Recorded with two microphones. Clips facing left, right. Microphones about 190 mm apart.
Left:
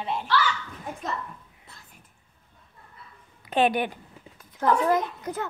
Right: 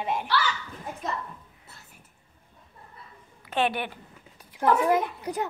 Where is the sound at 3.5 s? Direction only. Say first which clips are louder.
Left 4 dB; 15° left (ahead or behind).